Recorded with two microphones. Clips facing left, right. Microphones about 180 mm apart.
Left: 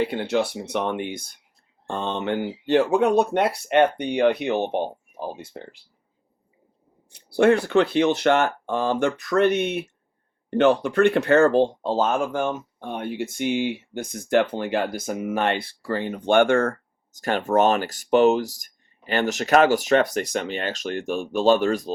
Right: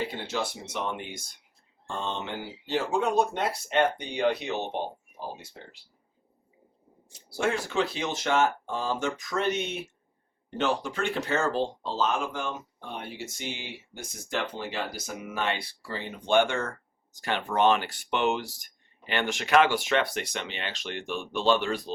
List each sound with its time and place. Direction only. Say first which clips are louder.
0.1 s speech: left 9 dB; 60° left (ahead or behind)
7.1 s speech: left 11 dB; 60° left (ahead or behind); by 21.9 s 45° left (ahead or behind)